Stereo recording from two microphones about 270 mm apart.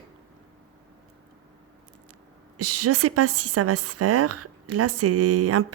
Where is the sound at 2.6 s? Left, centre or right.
Right.